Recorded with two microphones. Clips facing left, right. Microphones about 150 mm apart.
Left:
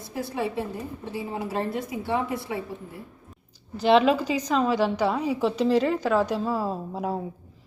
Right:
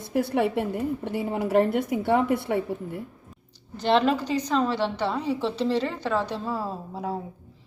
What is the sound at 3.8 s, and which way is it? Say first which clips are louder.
A woman's voice: left 3 dB; 10° left (ahead or behind).